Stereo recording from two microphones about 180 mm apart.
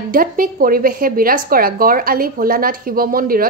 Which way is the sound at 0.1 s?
50° right (ahead or behind).